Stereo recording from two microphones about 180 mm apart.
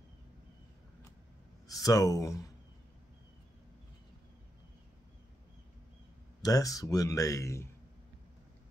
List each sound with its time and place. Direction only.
1.7 s speech: 20° left (ahead or behind)
6.4 s speech: 20° left (ahead or behind)